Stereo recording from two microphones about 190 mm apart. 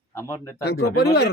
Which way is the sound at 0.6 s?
60° left (ahead or behind).